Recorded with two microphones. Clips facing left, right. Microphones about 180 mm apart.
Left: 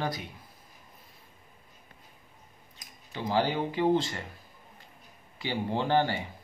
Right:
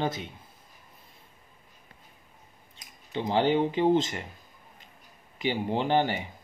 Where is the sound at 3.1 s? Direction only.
25° right (ahead or behind).